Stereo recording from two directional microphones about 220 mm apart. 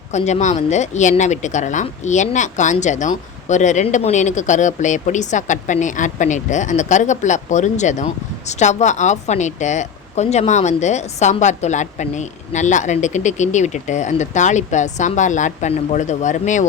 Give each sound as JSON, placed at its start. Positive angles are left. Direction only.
{"t": 0.1, "sound": "speech", "side_deg": 30}